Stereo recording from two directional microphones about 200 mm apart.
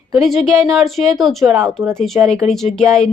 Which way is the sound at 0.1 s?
Centre (ahead or behind).